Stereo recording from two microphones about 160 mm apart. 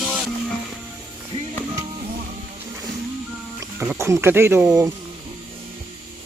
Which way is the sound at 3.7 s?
15° right (ahead or behind).